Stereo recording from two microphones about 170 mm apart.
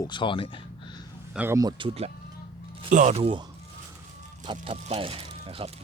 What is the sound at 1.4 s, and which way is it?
Speech, 15° right (ahead or behind).